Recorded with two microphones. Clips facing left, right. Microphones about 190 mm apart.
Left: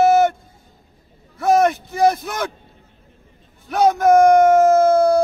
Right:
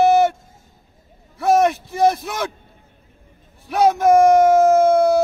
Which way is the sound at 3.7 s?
5° right (ahead or behind).